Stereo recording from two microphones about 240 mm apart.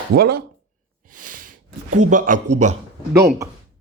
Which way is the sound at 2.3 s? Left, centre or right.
Right.